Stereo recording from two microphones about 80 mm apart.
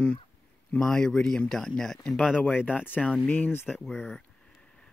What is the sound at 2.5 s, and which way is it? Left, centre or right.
Speech, left.